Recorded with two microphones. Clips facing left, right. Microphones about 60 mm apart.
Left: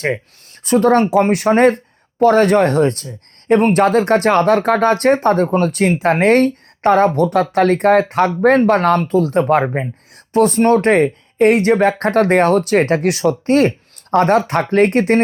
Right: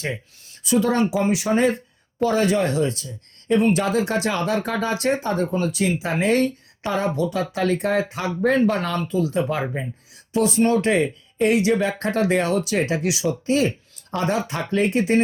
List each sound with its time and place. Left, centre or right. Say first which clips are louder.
0.6 s speech: left 7 dB; left